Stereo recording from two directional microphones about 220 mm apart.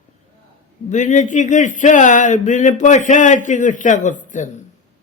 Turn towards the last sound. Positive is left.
turn(degrees=35)  # may be behind; listen again after turning